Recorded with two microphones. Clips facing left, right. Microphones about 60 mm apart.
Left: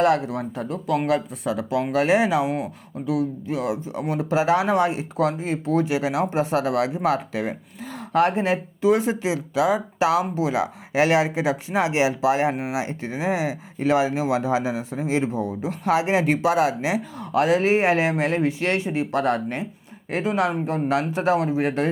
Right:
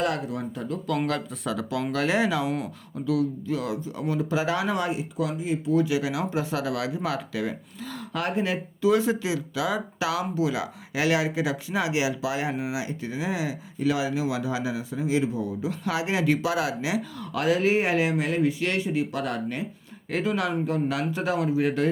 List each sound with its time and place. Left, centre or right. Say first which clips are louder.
0.0 s speech: left 7 dB; left
1.0 s speech: left 5 dB; centre; by 5.0 s left
5.2 s speech: left 5 dB; left